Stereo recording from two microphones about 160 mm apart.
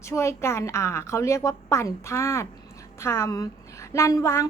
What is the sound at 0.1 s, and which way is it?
A woman's voice, 15° left (ahead or behind).